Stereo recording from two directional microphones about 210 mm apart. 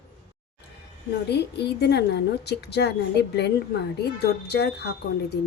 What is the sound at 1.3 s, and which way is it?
A woman's voice, 50° left (ahead or behind).